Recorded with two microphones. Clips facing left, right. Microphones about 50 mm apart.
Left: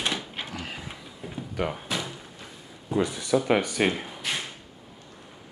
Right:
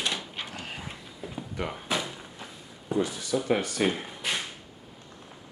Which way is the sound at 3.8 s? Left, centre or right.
Left.